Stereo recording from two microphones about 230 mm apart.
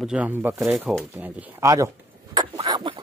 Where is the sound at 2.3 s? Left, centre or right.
Centre.